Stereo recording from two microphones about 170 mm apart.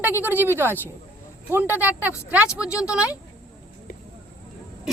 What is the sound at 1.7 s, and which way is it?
A woman's voice, 10° right (ahead or behind).